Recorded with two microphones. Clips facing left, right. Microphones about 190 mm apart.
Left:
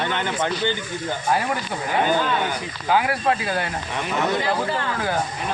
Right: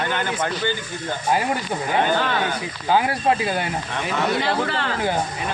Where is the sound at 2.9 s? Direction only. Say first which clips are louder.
Right 1 dB; 25° right (ahead or behind).